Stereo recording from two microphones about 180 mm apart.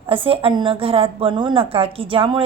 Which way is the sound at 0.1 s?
30° right (ahead or behind).